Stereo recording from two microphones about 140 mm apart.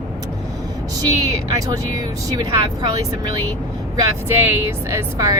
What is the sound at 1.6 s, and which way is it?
Speech, 25° right (ahead or behind).